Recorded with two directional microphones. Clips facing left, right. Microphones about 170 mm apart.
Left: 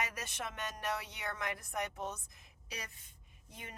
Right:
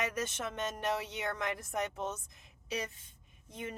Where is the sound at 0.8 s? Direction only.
25° right (ahead or behind).